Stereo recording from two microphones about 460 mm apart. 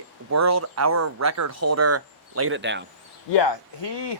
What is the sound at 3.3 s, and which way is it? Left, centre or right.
Speech, left.